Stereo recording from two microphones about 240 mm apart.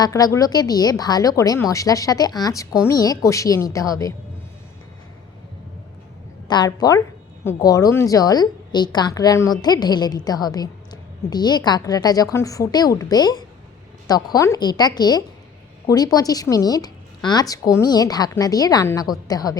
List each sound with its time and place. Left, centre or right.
0.0 s a woman's voice: centre
6.5 s a woman's voice: centre